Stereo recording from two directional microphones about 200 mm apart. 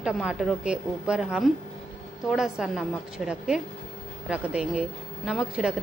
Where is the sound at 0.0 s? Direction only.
5° right (ahead or behind).